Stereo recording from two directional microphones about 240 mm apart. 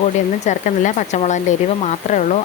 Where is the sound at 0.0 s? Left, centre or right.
Left.